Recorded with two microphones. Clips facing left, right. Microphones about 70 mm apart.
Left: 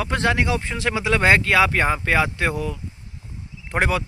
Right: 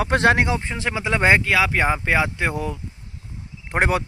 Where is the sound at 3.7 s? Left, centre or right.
Right.